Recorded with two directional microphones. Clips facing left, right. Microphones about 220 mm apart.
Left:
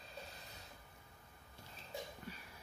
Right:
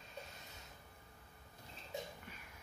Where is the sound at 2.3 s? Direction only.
35° left (ahead or behind).